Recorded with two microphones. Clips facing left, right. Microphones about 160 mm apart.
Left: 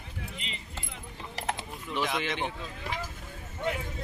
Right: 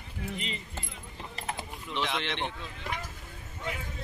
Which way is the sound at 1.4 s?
85° left.